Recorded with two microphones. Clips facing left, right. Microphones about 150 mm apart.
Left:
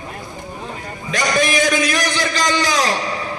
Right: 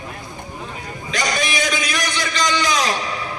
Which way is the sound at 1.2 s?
45° left (ahead or behind).